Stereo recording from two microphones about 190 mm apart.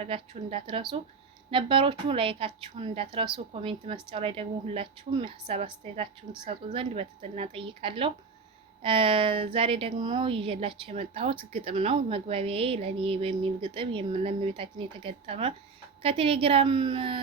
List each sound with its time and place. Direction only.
0.0 s a woman's voice: 30° right (ahead or behind)